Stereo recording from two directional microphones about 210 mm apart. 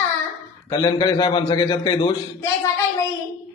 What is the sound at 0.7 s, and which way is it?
A man's voice, 20° left (ahead or behind).